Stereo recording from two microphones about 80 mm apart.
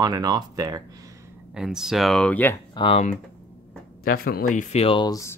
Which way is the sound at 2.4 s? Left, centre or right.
Left.